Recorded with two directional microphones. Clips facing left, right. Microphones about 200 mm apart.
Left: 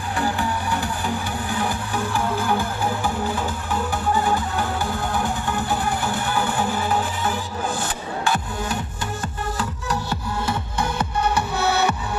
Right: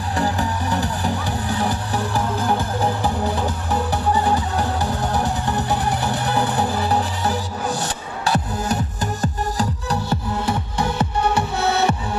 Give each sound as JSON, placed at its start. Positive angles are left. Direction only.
{"t": 0.2, "sound": "music", "side_deg": -40}
{"t": 11.0, "sound": "music", "side_deg": -30}